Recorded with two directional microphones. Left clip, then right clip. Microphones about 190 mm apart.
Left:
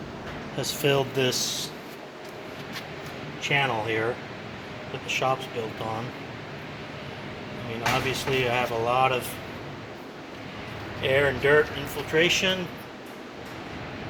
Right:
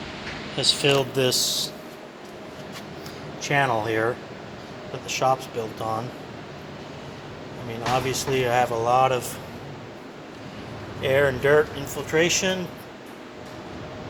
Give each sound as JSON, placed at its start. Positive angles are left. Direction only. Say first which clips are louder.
{"t": 0.5, "sound": "speech", "louder": "right 4 dB", "side_deg": -10}
{"t": 3.4, "sound": "speech", "louder": "right 3 dB", "side_deg": -25}
{"t": 8.1, "sound": "speech", "louder": "right 3 dB", "side_deg": -20}
{"t": 11.0, "sound": "speech", "louder": "right 2 dB", "side_deg": -20}